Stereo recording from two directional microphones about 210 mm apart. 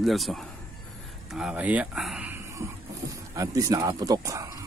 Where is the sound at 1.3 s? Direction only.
5° right (ahead or behind).